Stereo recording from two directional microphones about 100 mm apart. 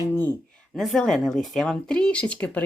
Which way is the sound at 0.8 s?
5° left (ahead or behind).